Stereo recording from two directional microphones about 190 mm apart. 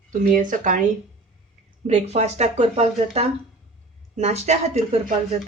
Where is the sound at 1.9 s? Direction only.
35° right (ahead or behind).